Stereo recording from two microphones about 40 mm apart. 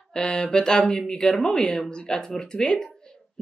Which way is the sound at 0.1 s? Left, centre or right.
Centre.